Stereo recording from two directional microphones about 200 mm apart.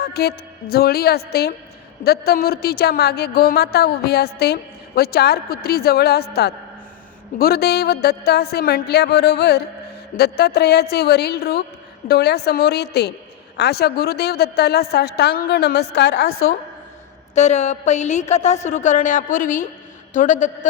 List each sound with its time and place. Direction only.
0.0 s a woman's voice: 50° left (ahead or behind); by 16.6 s 90° left
17.3 s a woman's voice: 35° left (ahead or behind)